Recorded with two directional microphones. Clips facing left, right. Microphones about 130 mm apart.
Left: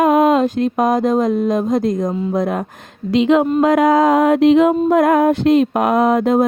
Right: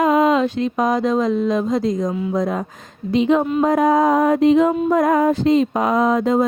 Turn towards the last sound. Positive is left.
turn(degrees=55)  # may be behind; listen again after turning